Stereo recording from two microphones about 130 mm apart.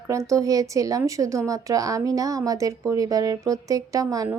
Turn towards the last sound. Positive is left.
turn(degrees=-25)  # may be behind; listen again after turning